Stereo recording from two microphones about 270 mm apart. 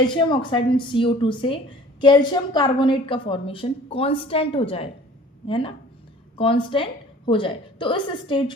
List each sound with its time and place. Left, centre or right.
0.2 s a woman's voice: centre